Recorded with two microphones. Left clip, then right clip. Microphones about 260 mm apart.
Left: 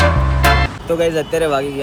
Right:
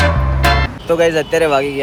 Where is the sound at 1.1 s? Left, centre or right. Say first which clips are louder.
Right 3 dB; centre.